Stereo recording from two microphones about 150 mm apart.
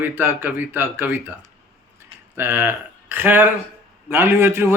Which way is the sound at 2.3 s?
15° right (ahead or behind).